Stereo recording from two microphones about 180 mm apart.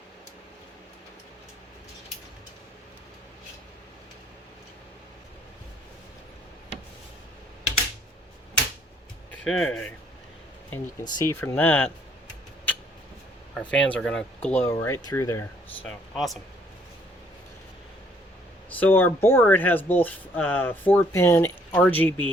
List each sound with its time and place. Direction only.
9.3 s speech: 5° left (ahead or behind)
11.0 s speech: 15° left (ahead or behind)
13.5 s speech: 5° left (ahead or behind)
15.9 s speech: centre (ahead or behind)
18.8 s speech: 10° left (ahead or behind)